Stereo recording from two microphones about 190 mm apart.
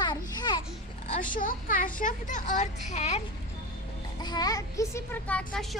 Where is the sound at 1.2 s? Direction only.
45° left (ahead or behind).